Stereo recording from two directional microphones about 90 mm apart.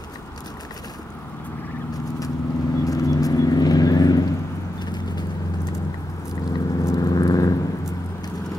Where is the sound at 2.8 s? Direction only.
40° left (ahead or behind).